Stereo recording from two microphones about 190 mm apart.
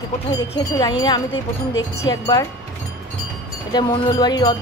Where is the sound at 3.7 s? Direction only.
20° left (ahead or behind).